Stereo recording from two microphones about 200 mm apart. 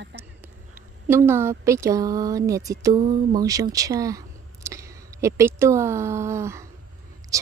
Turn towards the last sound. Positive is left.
turn(degrees=-15)  # may be behind; listen again after turning